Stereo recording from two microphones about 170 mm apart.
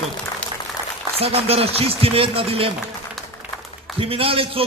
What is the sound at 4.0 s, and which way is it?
Speech, 35° right (ahead or behind).